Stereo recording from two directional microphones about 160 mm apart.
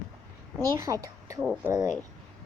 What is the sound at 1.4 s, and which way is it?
Speech, 5° right (ahead or behind).